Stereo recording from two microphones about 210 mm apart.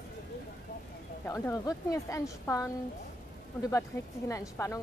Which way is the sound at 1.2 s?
10° left (ahead or behind).